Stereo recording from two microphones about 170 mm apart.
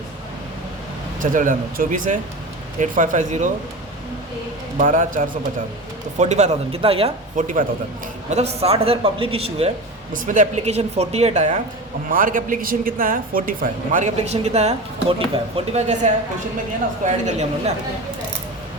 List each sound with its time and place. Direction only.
1.2 s a woman's voice: 50° right (ahead or behind)
4.8 s a woman's voice: 50° right (ahead or behind)
7.3 s a woman's voice: 50° right (ahead or behind)
8.3 s a man's voice: 40° right (ahead or behind)
10.1 s a woman's voice: 50° right (ahead or behind)
13.9 s a man's voice: 40° right (ahead or behind)